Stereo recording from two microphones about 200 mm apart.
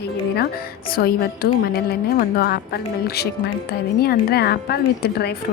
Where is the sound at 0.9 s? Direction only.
50° left (ahead or behind).